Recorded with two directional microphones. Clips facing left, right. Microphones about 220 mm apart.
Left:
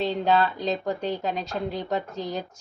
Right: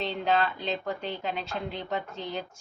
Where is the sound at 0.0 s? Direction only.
35° left (ahead or behind).